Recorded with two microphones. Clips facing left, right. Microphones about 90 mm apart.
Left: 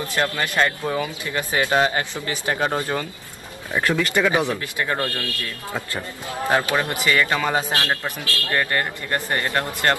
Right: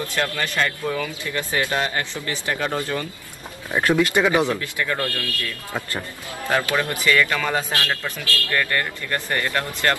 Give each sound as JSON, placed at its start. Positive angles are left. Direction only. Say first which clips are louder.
{"t": 0.1, "sound": "a man's voice", "louder": "left 4 dB", "side_deg": 25}
{"t": 3.7, "sound": "speech", "louder": "right 2 dB", "side_deg": -15}
{"t": 4.6, "sound": "a man's voice", "louder": "left 1 dB", "side_deg": 30}